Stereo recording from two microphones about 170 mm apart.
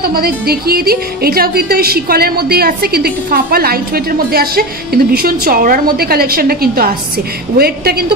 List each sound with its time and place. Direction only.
0.1 s speech: 60° right (ahead or behind)